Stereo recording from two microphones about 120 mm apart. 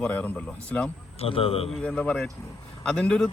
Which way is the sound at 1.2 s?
50° left (ahead or behind).